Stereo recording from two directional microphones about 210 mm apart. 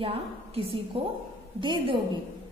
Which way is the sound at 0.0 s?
25° right (ahead or behind).